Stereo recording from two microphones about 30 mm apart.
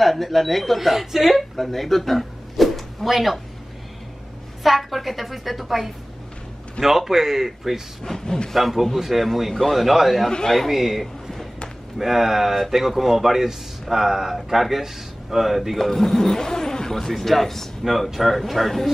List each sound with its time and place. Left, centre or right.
0.0 s a woman's voice: centre
0.7 s speech: centre
1.3 s speech: centre
4.6 s a woman's voice: centre
8.0 s speech: centre
9.0 s a woman's voice: centre
9.5 s speech: centre
9.8 s a woman's voice: centre
15.8 s speech: centre
17.1 s a woman's voice: centre